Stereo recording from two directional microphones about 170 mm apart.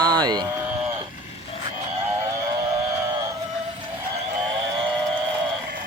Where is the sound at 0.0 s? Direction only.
25° right (ahead or behind).